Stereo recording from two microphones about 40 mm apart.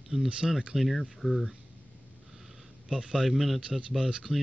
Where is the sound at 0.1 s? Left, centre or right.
Right.